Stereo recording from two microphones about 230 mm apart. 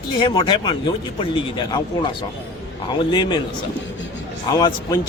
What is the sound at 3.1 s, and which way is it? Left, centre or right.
Speech, left.